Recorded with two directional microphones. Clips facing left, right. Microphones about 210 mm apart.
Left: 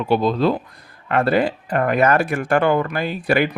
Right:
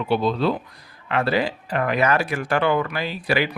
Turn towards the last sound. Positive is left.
turn(degrees=50)  # may be behind; listen again after turning